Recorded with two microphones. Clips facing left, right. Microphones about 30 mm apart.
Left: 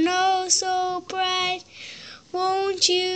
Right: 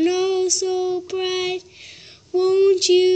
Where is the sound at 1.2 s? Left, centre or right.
Left.